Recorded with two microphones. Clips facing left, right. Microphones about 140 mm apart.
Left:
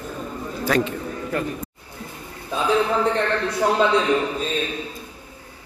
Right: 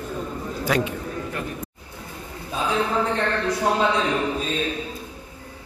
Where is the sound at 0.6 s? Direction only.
15° right (ahead or behind).